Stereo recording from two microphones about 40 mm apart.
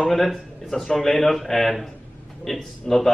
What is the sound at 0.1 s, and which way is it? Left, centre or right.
A man's voice, centre.